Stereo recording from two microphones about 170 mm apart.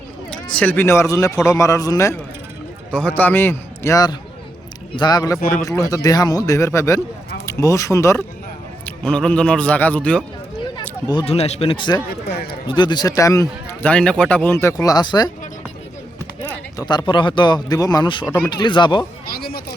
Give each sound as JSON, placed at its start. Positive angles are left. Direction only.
{"t": 0.3, "sound": "speech", "side_deg": 5}
{"t": 9.0, "sound": "speech", "side_deg": 5}
{"t": 11.0, "sound": "speech", "side_deg": 25}
{"t": 13.8, "sound": "speech", "side_deg": 5}
{"t": 16.4, "sound": "speech", "side_deg": 25}
{"t": 19.3, "sound": "a sound", "side_deg": 65}